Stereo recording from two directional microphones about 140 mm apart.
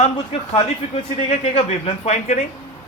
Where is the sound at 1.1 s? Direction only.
55° left (ahead or behind).